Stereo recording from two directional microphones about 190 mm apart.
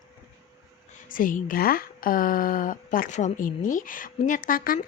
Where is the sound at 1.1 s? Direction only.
45° left (ahead or behind).